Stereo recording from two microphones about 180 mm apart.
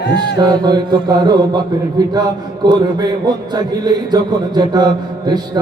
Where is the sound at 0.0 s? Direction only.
75° left (ahead or behind).